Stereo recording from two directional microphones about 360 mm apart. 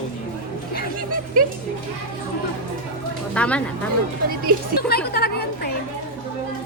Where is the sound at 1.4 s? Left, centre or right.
Right.